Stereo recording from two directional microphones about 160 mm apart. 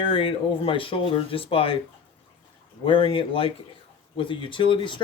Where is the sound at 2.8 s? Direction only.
35° left (ahead or behind).